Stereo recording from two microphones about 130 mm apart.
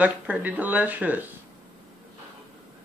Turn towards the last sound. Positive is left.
turn(degrees=-15)  # may be behind; listen again after turning